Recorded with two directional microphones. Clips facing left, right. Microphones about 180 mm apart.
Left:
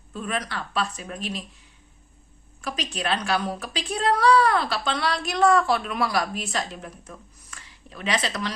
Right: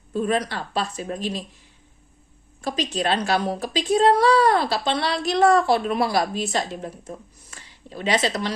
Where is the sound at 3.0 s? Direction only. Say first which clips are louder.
Right 3 dB; 30° right (ahead or behind).